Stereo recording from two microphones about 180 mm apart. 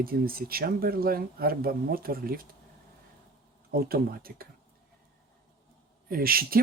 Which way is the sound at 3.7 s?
55° right (ahead or behind).